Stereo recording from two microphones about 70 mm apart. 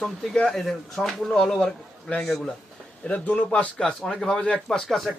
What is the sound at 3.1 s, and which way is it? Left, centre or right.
A man's voice, centre.